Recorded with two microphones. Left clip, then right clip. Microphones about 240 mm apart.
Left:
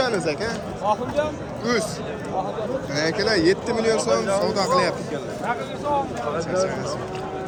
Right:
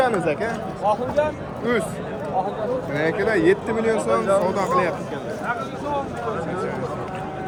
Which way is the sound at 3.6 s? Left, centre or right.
Left.